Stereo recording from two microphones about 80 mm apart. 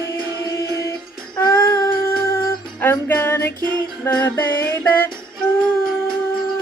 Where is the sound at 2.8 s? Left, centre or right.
Left.